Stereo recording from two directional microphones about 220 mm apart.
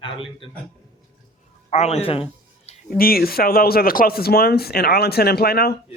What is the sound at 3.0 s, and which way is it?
Speech, 40° left (ahead or behind).